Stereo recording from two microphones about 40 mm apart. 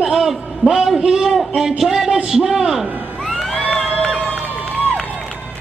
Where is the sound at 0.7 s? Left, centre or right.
Centre.